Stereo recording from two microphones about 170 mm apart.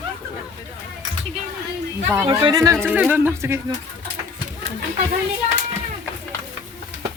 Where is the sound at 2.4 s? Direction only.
20° right (ahead or behind).